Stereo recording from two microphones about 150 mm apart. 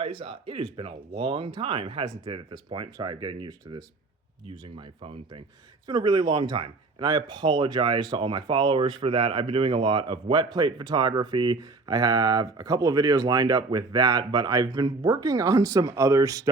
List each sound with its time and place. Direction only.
0.0 s speech: 40° right (ahead or behind); by 16.4 s 20° right (ahead or behind)